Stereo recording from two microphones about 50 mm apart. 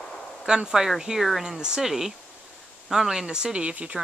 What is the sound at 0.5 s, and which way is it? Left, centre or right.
Speech, centre.